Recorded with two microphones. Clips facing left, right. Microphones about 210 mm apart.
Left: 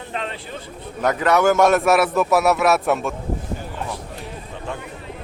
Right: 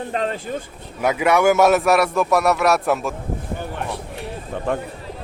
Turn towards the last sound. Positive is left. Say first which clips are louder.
# right 8 dB
turn(degrees=-55)  # may be behind; listen again after turning